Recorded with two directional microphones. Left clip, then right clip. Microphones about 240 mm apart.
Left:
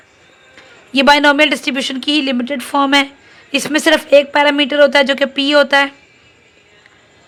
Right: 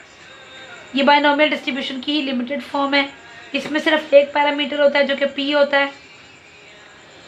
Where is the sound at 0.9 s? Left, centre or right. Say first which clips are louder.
Left 5 dB; left.